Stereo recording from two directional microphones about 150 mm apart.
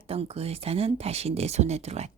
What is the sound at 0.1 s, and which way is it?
Speech, 40° right (ahead or behind).